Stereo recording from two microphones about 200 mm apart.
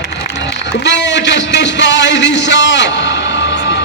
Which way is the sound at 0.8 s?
60° left (ahead or behind).